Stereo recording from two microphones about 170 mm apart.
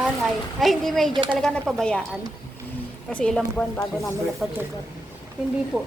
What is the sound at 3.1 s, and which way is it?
A woman's voice, 5° left (ahead or behind).